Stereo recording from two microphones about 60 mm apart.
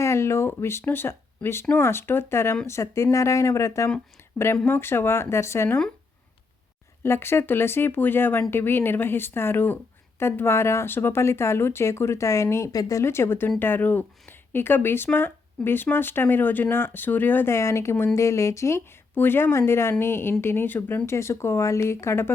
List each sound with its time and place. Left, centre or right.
0.0 s speech: left
2.6 s speech: left
4.6 s speech: left
7.0 s speech: left
13.1 s speech: left
17.5 s speech: left
19.1 s speech: left
21.1 s speech: left